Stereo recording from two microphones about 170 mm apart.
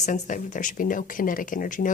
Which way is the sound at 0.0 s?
50° left (ahead or behind).